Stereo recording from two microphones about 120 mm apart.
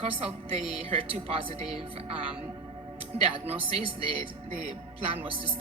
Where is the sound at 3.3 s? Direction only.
50° right (ahead or behind).